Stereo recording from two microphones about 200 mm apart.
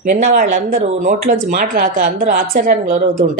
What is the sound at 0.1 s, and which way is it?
A woman's voice, 40° right (ahead or behind).